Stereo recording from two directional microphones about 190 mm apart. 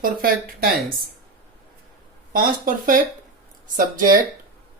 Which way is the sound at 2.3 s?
45° right (ahead or behind).